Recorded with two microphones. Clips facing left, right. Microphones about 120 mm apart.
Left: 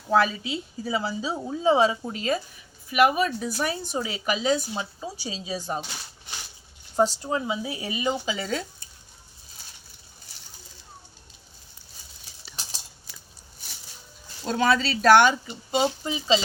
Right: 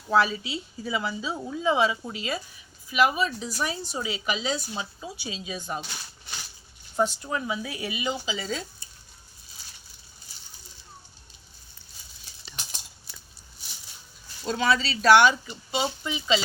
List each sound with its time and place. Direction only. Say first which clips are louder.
0.1 s speech: left 1 dB; 45° left (ahead or behind)
2.9 s a woman's voice: left 3 dB; 55° left (ahead or behind)
4.7 s speech: left 3 dB; 35° left (ahead or behind)
6.9 s speech: left 3 dB; 35° left (ahead or behind); by 8.6 s 55° left (ahead or behind)
14.4 s a woman's voice: left 2 dB; 45° left (ahead or behind)